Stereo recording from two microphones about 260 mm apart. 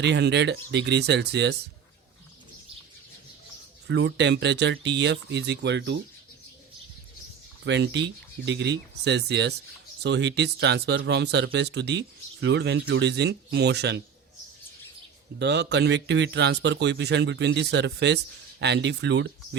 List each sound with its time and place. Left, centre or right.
0.0 s speech: right
3.8 s speech: right
7.6 s speech: right
15.4 s speech: right